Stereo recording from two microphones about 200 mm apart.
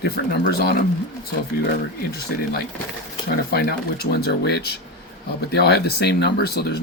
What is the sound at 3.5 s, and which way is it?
Speech, 50° left (ahead or behind).